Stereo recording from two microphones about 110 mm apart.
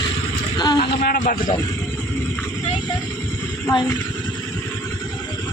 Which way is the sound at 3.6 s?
30° left (ahead or behind).